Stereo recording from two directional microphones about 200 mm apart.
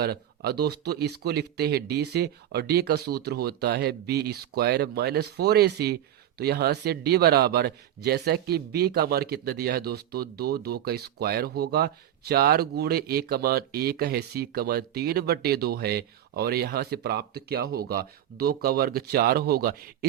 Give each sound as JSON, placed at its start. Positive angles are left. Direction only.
{"t": 0.0, "sound": "speech", "side_deg": -50}